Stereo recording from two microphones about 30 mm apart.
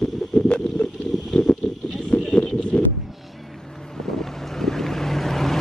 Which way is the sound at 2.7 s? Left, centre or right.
Centre.